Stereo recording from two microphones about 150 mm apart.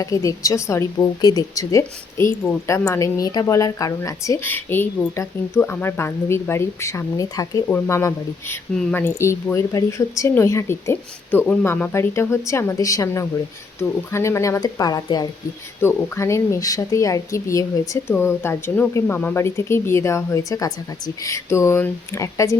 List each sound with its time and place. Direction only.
0.0 s a woman's voice: 20° left (ahead or behind)